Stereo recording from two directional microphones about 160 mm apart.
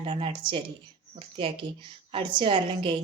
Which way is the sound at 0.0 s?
35° right (ahead or behind).